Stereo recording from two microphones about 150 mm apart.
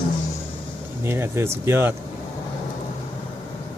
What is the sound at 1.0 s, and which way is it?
Speech, 15° right (ahead or behind).